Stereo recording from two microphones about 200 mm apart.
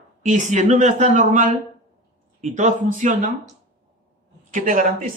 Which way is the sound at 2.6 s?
40° right (ahead or behind).